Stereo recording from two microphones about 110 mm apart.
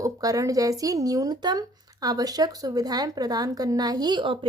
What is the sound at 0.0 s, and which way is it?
Speech, 30° right (ahead or behind).